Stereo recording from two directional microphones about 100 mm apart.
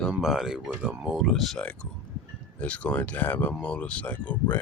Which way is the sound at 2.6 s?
15° left (ahead or behind).